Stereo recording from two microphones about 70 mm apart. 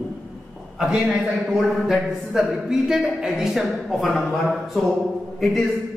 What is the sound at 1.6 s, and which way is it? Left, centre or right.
A woman's voice, centre.